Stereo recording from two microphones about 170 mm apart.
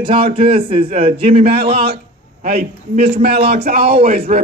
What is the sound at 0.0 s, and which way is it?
A man's voice, 30° right (ahead or behind).